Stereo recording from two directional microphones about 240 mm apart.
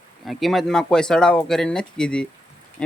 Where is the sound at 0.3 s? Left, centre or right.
Centre.